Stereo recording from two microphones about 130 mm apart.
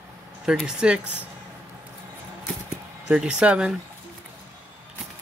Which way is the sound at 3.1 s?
10° right (ahead or behind).